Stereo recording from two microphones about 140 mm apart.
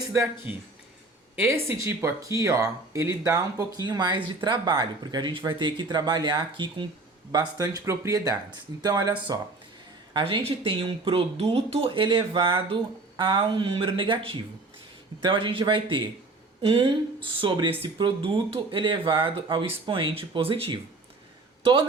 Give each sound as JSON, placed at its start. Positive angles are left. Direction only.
{"t": 0.1, "sound": "speech", "side_deg": -15}